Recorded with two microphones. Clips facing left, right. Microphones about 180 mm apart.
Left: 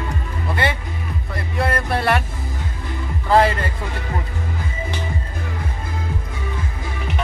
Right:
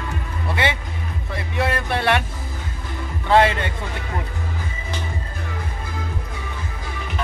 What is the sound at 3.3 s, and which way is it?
Music, centre (ahead or behind).